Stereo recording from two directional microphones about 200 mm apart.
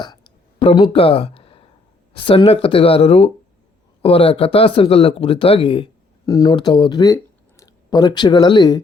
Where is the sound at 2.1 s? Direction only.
25° left (ahead or behind).